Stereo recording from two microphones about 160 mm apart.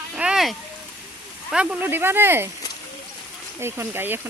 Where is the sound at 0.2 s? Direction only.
5° right (ahead or behind).